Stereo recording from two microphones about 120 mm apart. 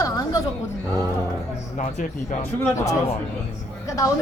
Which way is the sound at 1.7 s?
90° left.